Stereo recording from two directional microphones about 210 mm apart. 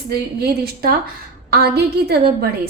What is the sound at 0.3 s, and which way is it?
A woman's voice, 50° right (ahead or behind).